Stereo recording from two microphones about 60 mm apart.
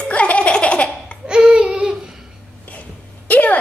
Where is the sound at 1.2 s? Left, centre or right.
Centre.